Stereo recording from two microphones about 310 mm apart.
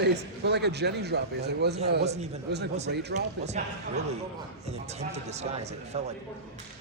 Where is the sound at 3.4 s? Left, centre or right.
Right.